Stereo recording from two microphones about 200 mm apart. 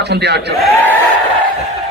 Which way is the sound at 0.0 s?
55° right (ahead or behind).